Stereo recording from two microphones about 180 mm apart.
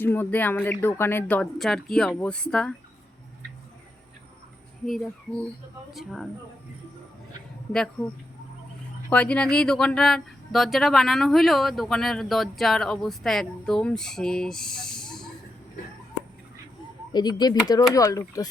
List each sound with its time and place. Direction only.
0.0 s speech: 10° left (ahead or behind)
4.9 s speech: centre (ahead or behind)
7.7 s speech: 5° left (ahead or behind)
17.1 s speech: 25° left (ahead or behind)